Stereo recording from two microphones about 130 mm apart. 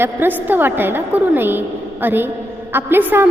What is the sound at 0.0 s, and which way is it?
A woman's voice, 15° right (ahead or behind).